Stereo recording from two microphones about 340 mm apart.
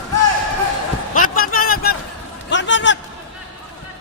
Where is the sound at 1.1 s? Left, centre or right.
Left.